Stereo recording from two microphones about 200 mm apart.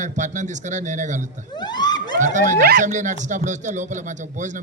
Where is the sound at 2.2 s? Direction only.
40° right (ahead or behind).